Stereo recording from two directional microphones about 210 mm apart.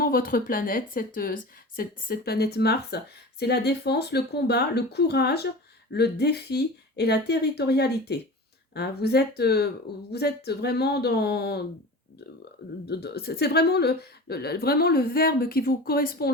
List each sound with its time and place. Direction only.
0.0 s speech: 45° left (ahead or behind)
12.8 s speech: 50° left (ahead or behind)